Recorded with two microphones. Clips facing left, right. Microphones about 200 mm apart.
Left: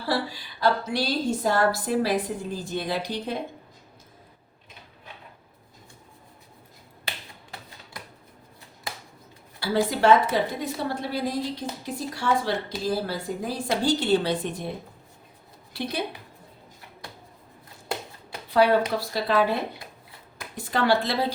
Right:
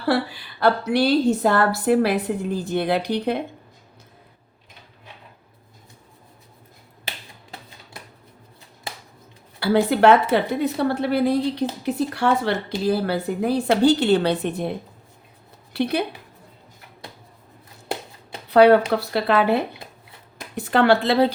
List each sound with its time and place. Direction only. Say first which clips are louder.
0.6 s a woman's voice: right 6 dB; 65° right (ahead or behind)
9.6 s a woman's voice: right 6 dB; 65° right (ahead or behind)
15.7 s a woman's voice: right 7 dB; 65° right (ahead or behind)
18.5 s a woman's voice: right 7 dB; 65° right (ahead or behind)
20.6 s a woman's voice: right 6 dB; 60° right (ahead or behind)